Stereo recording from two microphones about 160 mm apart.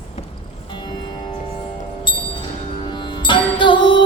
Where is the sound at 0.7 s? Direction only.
30° left (ahead or behind).